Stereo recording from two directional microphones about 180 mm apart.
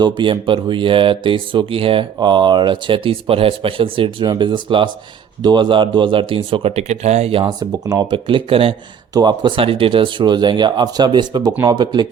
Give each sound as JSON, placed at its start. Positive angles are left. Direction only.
{"t": 0.0, "sound": "speech", "side_deg": -25}